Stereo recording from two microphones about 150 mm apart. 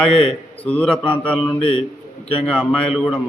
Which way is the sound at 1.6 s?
40° left (ahead or behind).